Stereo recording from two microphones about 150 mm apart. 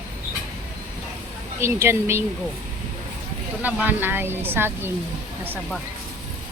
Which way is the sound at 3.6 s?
10° right (ahead or behind).